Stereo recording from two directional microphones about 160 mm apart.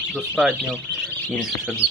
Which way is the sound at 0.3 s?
Centre (ahead or behind).